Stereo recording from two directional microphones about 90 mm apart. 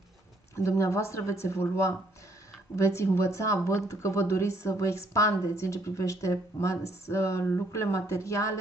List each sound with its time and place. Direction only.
0.6 s speech: 30° left (ahead or behind)